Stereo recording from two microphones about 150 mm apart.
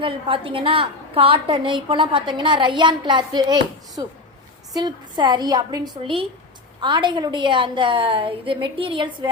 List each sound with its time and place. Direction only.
0.0 s a woman's voice: 35° right (ahead or behind)